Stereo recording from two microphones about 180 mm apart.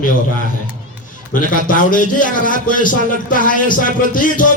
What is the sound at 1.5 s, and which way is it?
A man's voice, 50° left (ahead or behind).